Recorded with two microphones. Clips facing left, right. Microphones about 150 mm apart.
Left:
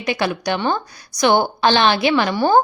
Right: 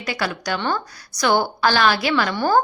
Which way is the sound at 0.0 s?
20° left (ahead or behind).